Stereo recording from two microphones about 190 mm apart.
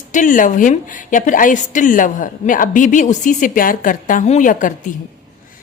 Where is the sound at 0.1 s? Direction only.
45° left (ahead or behind).